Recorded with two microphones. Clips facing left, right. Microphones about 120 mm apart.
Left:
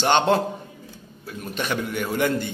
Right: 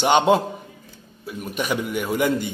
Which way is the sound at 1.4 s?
5° right (ahead or behind).